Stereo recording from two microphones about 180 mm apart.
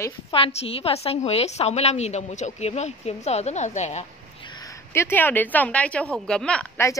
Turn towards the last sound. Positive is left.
turn(degrees=10)  # may be behind; listen again after turning